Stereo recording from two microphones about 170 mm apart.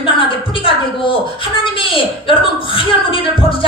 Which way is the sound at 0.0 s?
30° left (ahead or behind).